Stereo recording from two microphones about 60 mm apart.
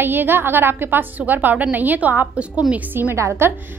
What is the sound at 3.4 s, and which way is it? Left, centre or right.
Speech, right.